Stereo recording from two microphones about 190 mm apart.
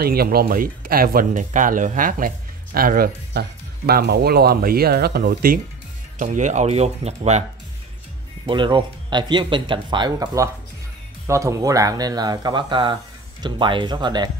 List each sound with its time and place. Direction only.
0.0 s speech: 55° right (ahead or behind)
6.1 s speech: 40° right (ahead or behind)
8.5 s speech: 25° right (ahead or behind)